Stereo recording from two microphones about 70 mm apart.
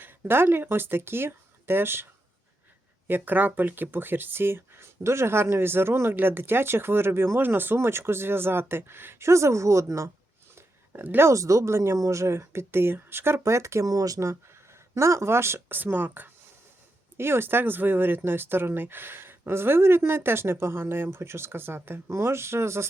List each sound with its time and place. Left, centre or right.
0.0 s speech: right
3.1 s speech: right
10.9 s speech: right
11.3 s speech: right
13.8 s speech: right